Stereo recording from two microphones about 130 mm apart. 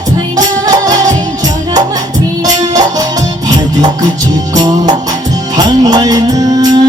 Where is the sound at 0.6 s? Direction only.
30° right (ahead or behind).